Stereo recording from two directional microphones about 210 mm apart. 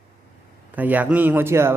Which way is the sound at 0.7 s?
10° right (ahead or behind).